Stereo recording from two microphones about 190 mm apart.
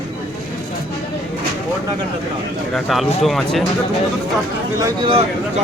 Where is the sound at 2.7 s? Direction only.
Centre (ahead or behind).